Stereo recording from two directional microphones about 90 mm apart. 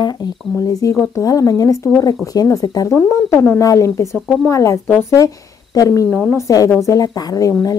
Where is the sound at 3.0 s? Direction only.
30° left (ahead or behind).